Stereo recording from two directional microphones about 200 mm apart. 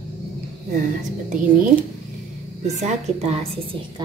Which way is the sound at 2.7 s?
35° right (ahead or behind).